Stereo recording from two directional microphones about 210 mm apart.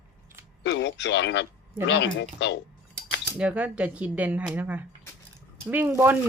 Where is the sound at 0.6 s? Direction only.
55° left (ahead or behind).